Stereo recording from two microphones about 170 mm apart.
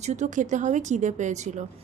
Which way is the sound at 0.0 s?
45° right (ahead or behind).